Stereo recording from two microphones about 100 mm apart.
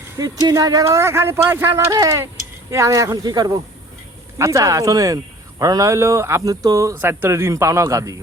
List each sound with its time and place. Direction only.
0.2 s speech: 40° right (ahead or behind)
4.4 s speech: 30° right (ahead or behind)
6.9 s speech: 20° right (ahead or behind)